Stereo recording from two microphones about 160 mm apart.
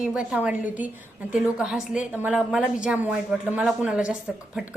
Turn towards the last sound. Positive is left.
turn(degrees=-5)  # may be behind; listen again after turning